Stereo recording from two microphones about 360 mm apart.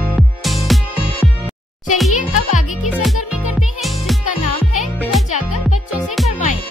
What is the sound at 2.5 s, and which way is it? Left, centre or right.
Music, left.